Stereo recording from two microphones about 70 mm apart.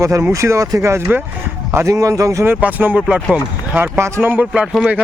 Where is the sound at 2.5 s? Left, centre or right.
Right.